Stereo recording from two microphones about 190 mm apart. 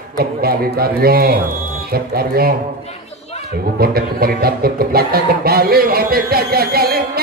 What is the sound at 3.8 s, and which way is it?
Speech, 55° right (ahead or behind).